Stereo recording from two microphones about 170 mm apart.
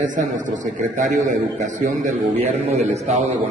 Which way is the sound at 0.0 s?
50° right (ahead or behind).